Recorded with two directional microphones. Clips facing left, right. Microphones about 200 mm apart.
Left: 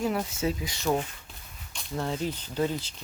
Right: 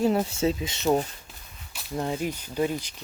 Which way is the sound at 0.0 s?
30° right (ahead or behind).